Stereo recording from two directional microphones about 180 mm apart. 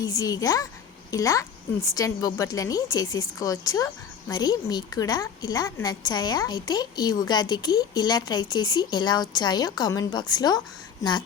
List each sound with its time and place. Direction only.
0.0 s a woman's voice: 20° left (ahead or behind)